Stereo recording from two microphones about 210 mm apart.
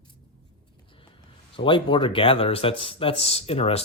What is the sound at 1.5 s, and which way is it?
Speech, 25° left (ahead or behind).